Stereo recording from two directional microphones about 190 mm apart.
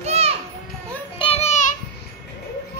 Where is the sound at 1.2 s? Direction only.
35° left (ahead or behind).